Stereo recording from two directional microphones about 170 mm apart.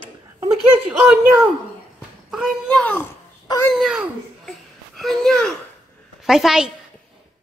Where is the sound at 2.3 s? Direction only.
Centre (ahead or behind).